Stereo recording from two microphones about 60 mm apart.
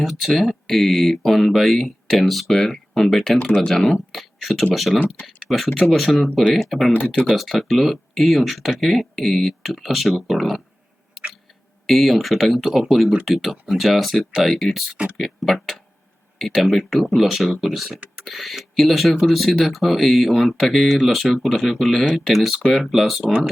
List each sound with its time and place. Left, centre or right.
0.0 s speech: centre
3.3 s speech: left
3.7 s speech: centre
6.9 s speech: left
7.3 s speech: centre
11.9 s speech: centre